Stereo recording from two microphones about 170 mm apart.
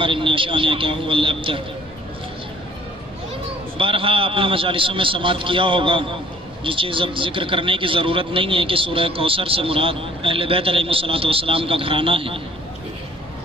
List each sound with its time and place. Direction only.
0.0 s speech: 30° right (ahead or behind)
3.8 s speech: 30° right (ahead or behind)